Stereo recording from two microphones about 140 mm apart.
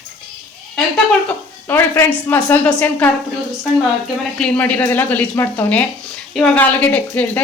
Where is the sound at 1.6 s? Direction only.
15° left (ahead or behind).